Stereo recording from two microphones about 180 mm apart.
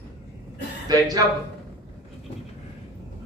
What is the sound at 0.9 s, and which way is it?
Speech, 20° right (ahead or behind).